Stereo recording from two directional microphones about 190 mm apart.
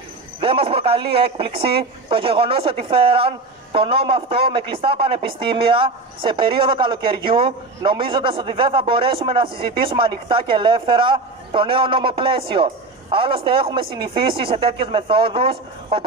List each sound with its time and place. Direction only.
0.4 s a man's voice: 30° right (ahead or behind)